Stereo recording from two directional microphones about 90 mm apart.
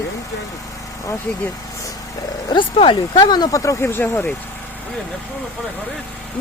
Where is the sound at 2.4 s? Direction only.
60° left (ahead or behind).